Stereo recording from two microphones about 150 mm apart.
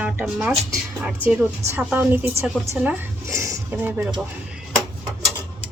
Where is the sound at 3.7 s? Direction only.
10° right (ahead or behind).